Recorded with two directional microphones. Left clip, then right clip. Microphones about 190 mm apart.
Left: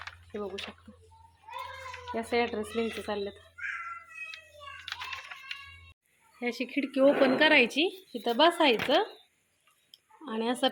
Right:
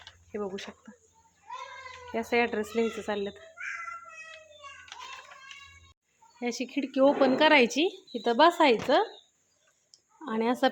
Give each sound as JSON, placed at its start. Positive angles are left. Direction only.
{"t": 0.0, "sound": "a sound", "side_deg": -10}
{"t": 2.1, "sound": "speech", "side_deg": -15}
{"t": 6.4, "sound": "speech", "side_deg": -10}
{"t": 10.2, "sound": "a woman's voice", "side_deg": -20}